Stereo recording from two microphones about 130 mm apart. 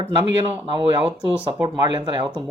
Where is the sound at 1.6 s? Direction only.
35° right (ahead or behind).